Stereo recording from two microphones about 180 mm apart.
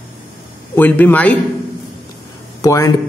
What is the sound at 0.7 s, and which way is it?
Speech, 10° left (ahead or behind).